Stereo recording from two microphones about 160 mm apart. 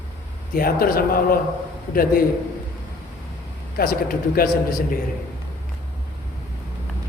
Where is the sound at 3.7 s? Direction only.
70° left (ahead or behind).